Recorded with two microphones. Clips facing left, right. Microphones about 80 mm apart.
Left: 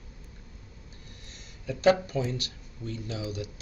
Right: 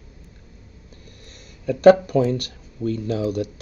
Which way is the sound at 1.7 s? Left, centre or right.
Right.